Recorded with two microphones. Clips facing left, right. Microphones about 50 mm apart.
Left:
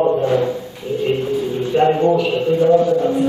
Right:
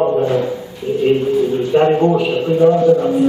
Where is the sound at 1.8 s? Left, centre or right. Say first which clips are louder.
Right 1 dB; centre.